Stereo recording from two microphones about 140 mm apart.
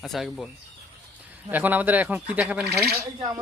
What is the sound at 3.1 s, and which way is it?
Speech, 35° right (ahead or behind).